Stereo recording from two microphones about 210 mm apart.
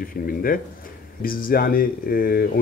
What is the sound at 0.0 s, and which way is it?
Speech, 45° left (ahead or behind).